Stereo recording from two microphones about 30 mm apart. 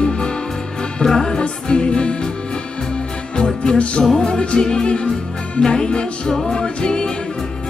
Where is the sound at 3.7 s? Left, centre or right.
Left.